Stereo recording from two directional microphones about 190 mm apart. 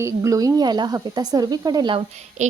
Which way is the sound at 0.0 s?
15° right (ahead or behind).